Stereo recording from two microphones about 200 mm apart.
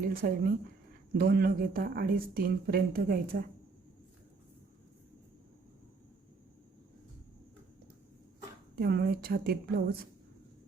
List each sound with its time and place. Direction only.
0.0 s speech: 45° right (ahead or behind)
8.7 s speech: 50° right (ahead or behind)